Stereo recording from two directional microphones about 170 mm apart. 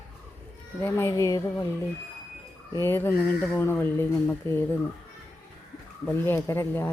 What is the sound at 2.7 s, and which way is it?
Speech, 15° left (ahead or behind).